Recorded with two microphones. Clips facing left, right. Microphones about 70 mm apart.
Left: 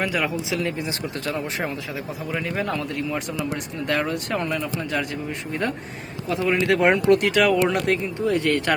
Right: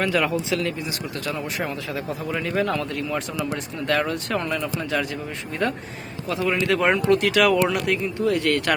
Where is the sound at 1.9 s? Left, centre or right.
Centre.